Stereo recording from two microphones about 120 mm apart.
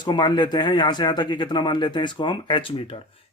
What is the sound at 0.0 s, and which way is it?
Speech, 40° left (ahead or behind).